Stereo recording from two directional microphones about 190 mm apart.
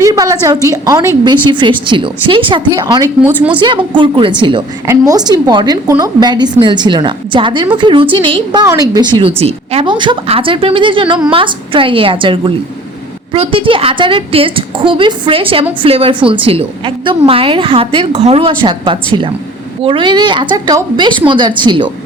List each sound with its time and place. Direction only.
0.0 s a sound: 15° right (ahead or behind)
0.4 s a woman's voice: 15° right (ahead or behind)
3.2 s a woman's voice: 5° right (ahead or behind)
3.6 s a woman's voice: 25° right (ahead or behind)